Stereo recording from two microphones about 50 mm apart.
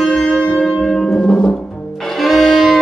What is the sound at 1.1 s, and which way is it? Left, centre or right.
Music, left.